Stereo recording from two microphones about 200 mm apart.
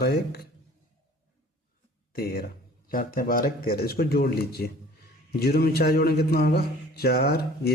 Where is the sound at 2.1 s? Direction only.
50° left (ahead or behind).